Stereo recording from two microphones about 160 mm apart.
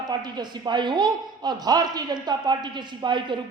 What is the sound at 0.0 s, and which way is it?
A woman's voice, 25° right (ahead or behind).